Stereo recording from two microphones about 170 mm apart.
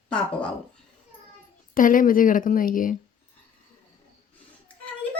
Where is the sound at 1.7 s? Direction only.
50° left (ahead or behind).